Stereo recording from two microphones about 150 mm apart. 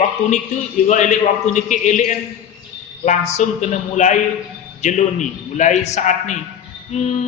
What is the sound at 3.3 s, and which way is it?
A man's voice, 50° left (ahead or behind).